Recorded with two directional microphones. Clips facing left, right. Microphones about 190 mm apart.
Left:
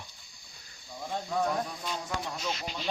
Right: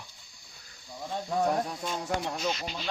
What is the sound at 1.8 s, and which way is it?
Speech, 45° right (ahead or behind).